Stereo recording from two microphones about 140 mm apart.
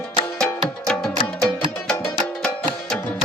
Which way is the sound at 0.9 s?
5° left (ahead or behind).